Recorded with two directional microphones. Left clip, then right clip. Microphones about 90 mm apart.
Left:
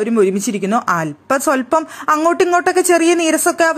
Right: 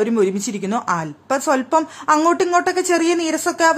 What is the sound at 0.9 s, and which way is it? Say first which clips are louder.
Speech: left 4 dB; 55° left (ahead or behind).